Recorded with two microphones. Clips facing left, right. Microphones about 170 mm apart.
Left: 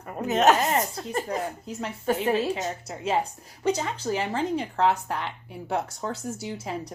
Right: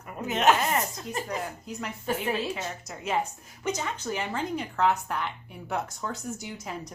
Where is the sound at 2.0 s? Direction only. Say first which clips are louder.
Left 5 dB; 40° left (ahead or behind).